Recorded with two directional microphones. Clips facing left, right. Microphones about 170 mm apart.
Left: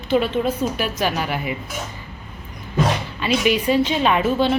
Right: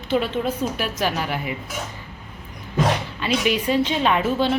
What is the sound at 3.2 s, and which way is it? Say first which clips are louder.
A woman's voice: left 3 dB; 10° left (ahead or behind).